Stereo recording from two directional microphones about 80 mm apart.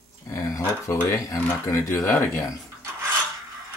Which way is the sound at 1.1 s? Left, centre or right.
Left.